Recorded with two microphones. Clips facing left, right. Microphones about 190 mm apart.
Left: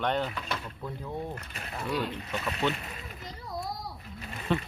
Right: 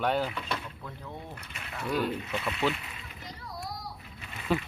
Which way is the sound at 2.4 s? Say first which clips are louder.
Even; 40° left (ahead or behind).